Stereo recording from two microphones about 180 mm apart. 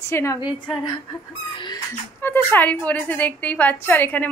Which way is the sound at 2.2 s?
10° left (ahead or behind).